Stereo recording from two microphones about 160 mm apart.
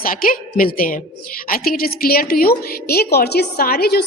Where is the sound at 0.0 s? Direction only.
60° left (ahead or behind).